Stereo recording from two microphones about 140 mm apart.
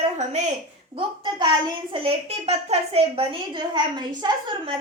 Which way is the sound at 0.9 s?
35° right (ahead or behind).